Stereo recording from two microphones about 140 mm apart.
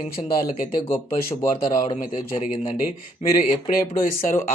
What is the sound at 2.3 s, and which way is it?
Speech, 45° left (ahead or behind).